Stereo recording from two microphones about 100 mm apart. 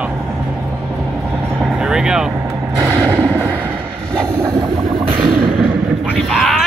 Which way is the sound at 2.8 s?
30° right (ahead or behind).